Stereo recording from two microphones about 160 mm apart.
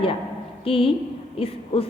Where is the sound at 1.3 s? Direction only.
35° left (ahead or behind).